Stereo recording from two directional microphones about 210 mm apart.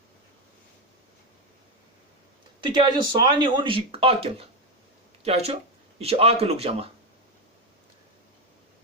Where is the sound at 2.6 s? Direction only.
20° right (ahead or behind).